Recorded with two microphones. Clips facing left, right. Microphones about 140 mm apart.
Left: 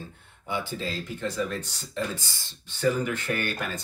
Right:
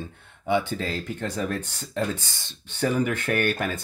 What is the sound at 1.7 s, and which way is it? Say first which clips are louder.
Speech: right 4 dB; 65° right (ahead or behind).